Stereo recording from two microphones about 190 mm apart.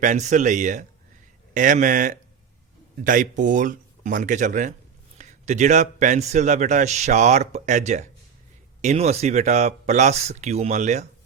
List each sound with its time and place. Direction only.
0.0 s a man's voice: 40° right (ahead or behind)